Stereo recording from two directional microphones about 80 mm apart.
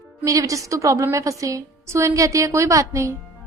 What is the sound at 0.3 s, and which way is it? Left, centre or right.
A woman's voice, right.